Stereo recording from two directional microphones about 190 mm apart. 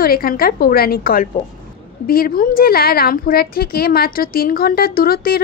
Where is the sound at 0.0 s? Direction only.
50° left (ahead or behind).